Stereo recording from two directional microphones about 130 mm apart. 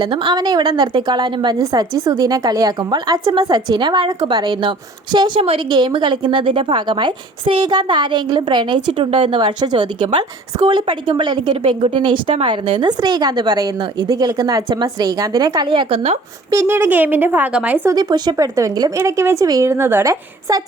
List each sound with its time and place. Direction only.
0.0 s a woman's voice: 40° right (ahead or behind)
16.5 s speech: 20° right (ahead or behind)
17.9 s a woman's voice: 35° right (ahead or behind)